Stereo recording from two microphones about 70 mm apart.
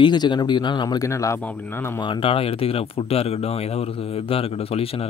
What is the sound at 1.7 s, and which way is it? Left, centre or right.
Speech, left.